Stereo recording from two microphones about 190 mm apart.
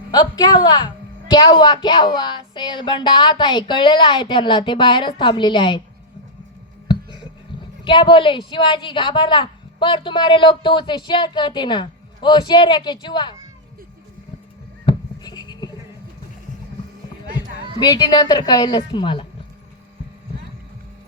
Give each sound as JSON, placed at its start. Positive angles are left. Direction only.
{"t": 0.1, "sound": "a woman's voice", "side_deg": 20}
{"t": 7.9, "sound": "a woman's voice", "side_deg": 25}
{"t": 14.8, "sound": "a sound", "side_deg": 20}
{"t": 17.7, "sound": "a woman's voice", "side_deg": 20}